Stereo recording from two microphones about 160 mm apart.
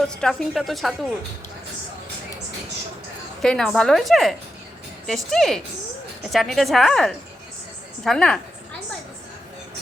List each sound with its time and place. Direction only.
0.1 s a woman's voice: 5° left (ahead or behind)
3.4 s a woman's voice: centre (ahead or behind)